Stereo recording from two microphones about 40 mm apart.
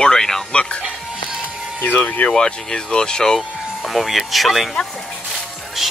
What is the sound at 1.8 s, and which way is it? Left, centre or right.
Speech, left.